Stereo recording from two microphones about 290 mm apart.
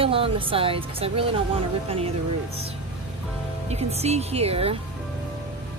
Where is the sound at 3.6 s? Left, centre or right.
Right.